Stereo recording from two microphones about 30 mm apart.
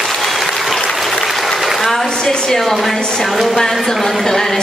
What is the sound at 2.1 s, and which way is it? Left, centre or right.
Speech, left.